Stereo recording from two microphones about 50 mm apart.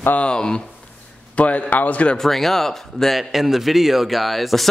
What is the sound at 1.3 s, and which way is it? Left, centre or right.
Speech, left.